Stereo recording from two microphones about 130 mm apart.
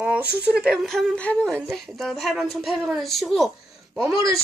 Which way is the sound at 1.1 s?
10° left (ahead or behind).